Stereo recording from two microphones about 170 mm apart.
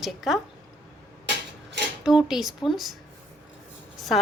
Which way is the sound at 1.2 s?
90° right.